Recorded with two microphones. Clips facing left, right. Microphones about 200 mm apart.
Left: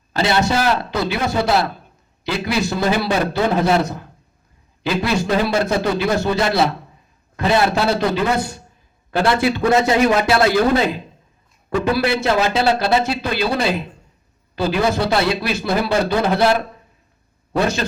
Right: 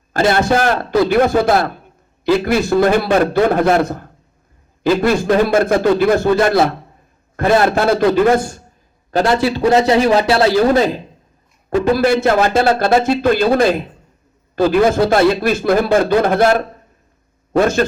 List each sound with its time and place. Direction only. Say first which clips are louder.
0.1 s a man's voice: right 4 dB; 50° right (ahead or behind)
11.9 s a man's voice: right 4 dB; 45° right (ahead or behind)